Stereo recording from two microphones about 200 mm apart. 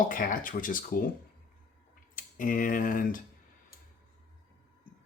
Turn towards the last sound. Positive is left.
turn(degrees=40)  # may be behind; listen again after turning